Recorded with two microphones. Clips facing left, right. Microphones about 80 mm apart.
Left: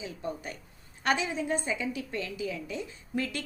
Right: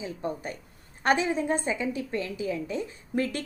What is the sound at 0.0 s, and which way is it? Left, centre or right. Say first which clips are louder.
A woman's voice: right 4 dB; right.